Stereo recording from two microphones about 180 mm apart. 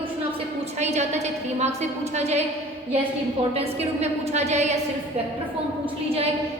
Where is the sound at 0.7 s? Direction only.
40° right (ahead or behind).